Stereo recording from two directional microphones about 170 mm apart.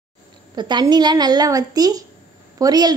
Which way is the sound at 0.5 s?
25° right (ahead or behind).